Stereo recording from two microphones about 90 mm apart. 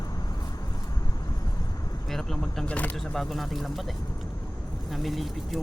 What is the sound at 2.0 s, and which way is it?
Vehicle, 5° left (ahead or behind).